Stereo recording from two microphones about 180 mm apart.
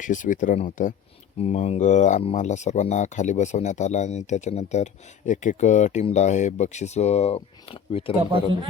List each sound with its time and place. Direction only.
0.0 s speech: 45° left (ahead or behind)